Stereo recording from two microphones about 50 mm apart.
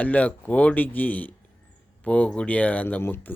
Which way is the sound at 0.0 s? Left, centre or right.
Left.